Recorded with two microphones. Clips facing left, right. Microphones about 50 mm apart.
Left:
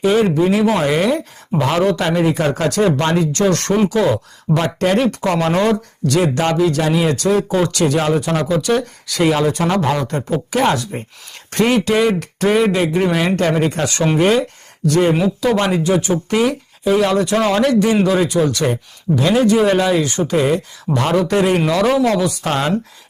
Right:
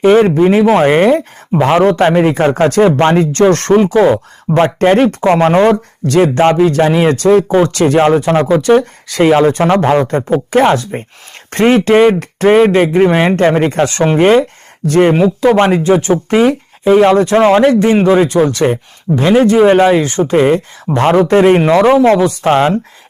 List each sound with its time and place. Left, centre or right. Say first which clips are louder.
0.0 s speech: right 7 dB; right